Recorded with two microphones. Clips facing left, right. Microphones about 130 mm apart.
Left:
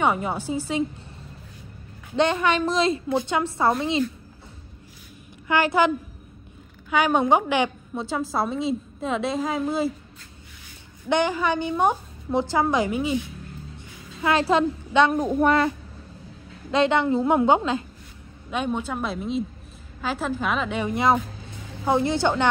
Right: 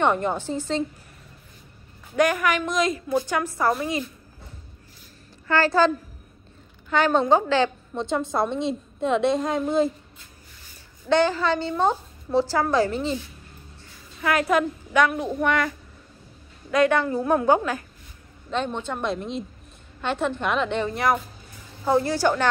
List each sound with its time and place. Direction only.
0.0 s a woman's voice: 5° left (ahead or behind)
2.1 s a woman's voice: 25° left (ahead or behind)
5.5 s a woman's voice: 20° left (ahead or behind)
11.1 s a woman's voice: 15° left (ahead or behind)
14.2 s a woman's voice: 25° left (ahead or behind)
16.7 s a woman's voice: 20° left (ahead or behind)
18.5 s a woman's voice: 10° left (ahead or behind)
20.9 s a woman's voice: 20° left (ahead or behind)